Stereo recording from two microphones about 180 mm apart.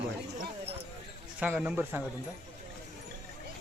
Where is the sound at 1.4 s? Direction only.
10° right (ahead or behind).